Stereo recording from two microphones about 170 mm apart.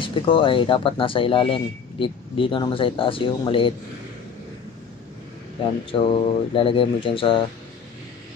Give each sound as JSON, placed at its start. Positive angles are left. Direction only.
{"t": 0.0, "sound": "speech", "side_deg": 30}
{"t": 5.9, "sound": "speech", "side_deg": 30}